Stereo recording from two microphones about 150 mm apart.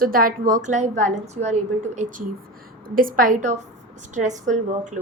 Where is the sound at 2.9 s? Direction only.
70° right (ahead or behind).